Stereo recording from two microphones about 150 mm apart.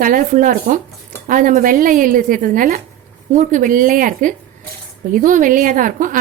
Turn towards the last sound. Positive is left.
turn(degrees=-60)  # may be behind; listen again after turning